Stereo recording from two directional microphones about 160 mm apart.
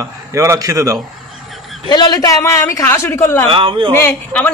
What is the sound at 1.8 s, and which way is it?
A woman's voice, 25° left (ahead or behind).